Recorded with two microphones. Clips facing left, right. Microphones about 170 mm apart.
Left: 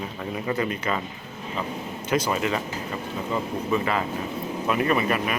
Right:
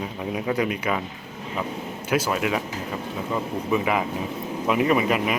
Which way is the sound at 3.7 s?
10° right (ahead or behind).